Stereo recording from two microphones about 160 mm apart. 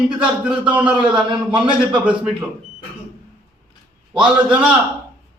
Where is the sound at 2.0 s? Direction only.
5° right (ahead or behind).